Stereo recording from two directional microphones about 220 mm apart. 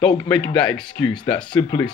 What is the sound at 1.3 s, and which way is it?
Speech, 20° left (ahead or behind).